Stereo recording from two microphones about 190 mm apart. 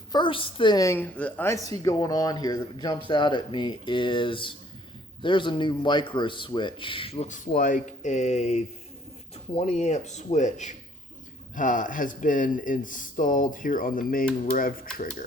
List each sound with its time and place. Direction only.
0.1 s speech: 25° left (ahead or behind); by 14.8 s 50° left (ahead or behind)